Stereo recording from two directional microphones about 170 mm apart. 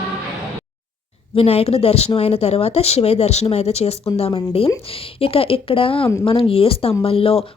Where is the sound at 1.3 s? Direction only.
35° left (ahead or behind).